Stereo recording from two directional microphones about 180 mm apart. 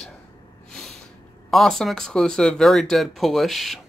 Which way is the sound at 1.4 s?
Centre (ahead or behind).